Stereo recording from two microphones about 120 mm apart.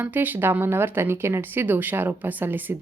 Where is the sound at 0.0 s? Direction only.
15° right (ahead or behind).